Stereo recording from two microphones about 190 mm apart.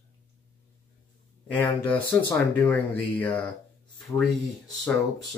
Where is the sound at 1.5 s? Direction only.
10° left (ahead or behind).